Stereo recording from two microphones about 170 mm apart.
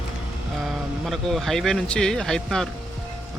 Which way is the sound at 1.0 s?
Centre (ahead or behind).